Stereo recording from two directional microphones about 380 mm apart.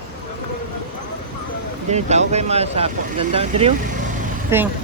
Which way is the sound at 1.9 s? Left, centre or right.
Centre.